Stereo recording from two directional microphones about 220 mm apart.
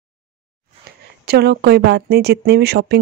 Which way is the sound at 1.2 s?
45° right (ahead or behind).